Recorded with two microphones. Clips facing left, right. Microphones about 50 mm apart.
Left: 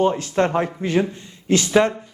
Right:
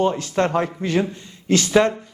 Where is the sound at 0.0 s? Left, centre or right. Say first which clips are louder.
Left 1 dB; left.